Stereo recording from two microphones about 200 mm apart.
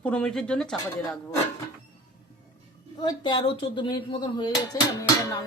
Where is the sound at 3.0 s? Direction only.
25° left (ahead or behind).